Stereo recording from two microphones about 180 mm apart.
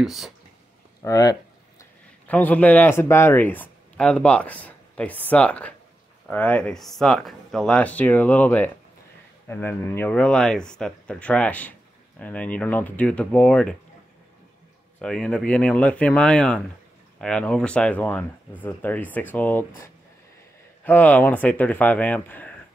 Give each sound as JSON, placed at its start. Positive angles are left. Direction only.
{"t": 0.0, "sound": "speech", "side_deg": 0}
{"t": 1.0, "sound": "a sound", "side_deg": 20}
{"t": 2.2, "sound": "speech", "side_deg": 10}
{"t": 15.0, "sound": "speech", "side_deg": 5}
{"t": 20.8, "sound": "speech", "side_deg": 10}